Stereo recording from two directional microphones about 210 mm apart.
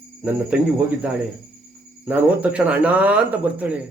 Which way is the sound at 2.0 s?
5° right (ahead or behind).